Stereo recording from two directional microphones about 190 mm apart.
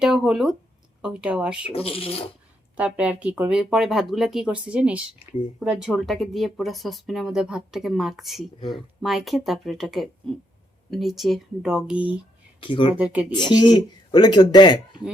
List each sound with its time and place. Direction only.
0.0 s speech: 5° right (ahead or behind)
1.7 s speech: 30° left (ahead or behind)
2.7 s speech: 5° right (ahead or behind)
12.5 s speech: 25° left (ahead or behind)
12.9 s speech: 5° right (ahead or behind)
13.3 s speech: 20° left (ahead or behind)